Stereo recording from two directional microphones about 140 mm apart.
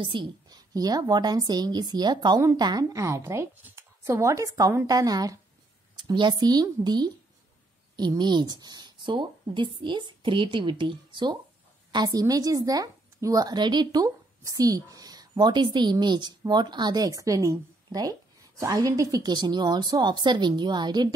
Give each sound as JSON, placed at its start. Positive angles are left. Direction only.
{"t": 0.0, "sound": "speech", "side_deg": -35}